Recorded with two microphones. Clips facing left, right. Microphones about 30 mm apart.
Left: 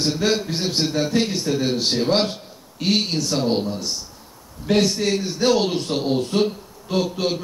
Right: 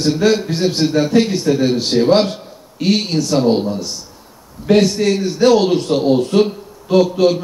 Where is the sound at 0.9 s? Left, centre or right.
Centre.